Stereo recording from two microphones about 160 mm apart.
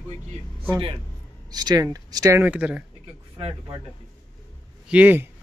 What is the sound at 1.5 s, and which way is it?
Speech, 25° right (ahead or behind).